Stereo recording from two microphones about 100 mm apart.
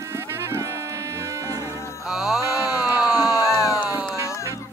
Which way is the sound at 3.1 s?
40° left (ahead or behind).